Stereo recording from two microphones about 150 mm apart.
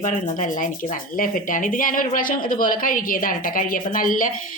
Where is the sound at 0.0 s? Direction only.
55° left (ahead or behind).